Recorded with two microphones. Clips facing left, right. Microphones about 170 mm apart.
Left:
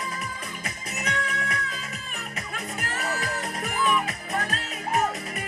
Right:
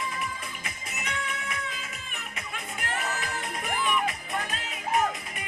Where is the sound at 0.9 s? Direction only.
40° left (ahead or behind).